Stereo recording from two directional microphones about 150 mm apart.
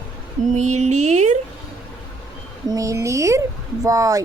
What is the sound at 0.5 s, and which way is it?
Speech, 50° right (ahead or behind).